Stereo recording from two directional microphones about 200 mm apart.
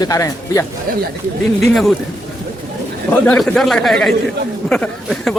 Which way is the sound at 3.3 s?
5° left (ahead or behind).